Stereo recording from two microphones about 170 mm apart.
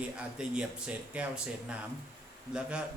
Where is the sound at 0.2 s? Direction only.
5° right (ahead or behind).